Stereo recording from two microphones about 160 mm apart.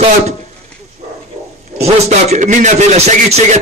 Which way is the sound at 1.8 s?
45° right (ahead or behind).